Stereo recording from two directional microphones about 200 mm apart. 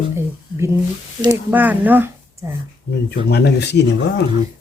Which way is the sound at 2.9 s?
55° left (ahead or behind).